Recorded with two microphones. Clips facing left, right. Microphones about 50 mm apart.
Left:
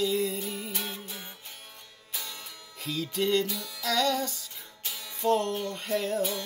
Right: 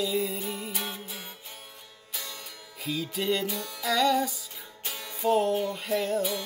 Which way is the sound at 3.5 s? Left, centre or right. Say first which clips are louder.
Right 3 dB; right.